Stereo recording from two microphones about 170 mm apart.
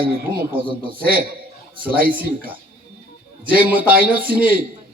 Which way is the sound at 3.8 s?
55° right (ahead or behind).